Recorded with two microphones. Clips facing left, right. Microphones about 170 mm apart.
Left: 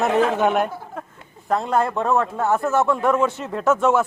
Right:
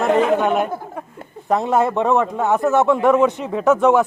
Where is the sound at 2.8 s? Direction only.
20° right (ahead or behind).